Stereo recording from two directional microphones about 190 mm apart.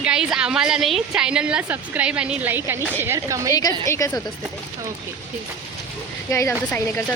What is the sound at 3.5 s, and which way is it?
Speech, 20° left (ahead or behind).